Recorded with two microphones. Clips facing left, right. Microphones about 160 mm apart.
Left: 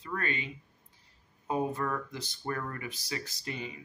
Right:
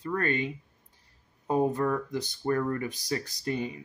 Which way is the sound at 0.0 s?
45° right (ahead or behind).